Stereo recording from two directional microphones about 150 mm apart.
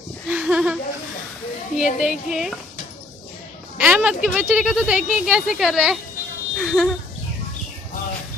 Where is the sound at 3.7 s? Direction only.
10° right (ahead or behind).